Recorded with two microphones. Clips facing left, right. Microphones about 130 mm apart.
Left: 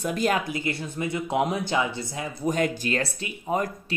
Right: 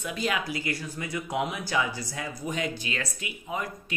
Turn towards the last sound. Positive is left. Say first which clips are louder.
# left 7 dB
turn(degrees=45)  # may be behind; listen again after turning